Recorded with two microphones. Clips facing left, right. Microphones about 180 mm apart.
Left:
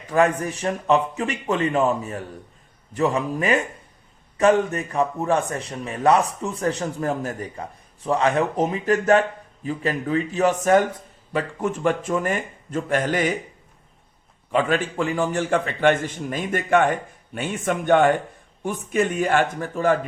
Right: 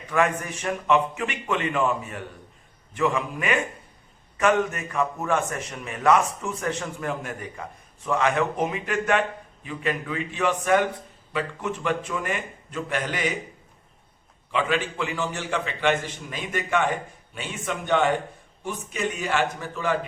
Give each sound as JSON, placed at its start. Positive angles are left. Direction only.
{"t": 0.1, "sound": "a man's voice", "side_deg": 35}
{"t": 14.5, "sound": "a man's voice", "side_deg": 45}